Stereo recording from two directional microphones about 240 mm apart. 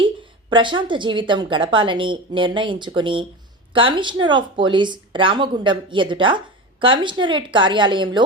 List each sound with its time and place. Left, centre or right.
0.5 s speech: centre